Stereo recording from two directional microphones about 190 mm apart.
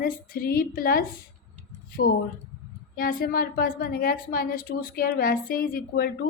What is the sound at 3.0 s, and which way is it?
A woman's voice, 50° left (ahead or behind).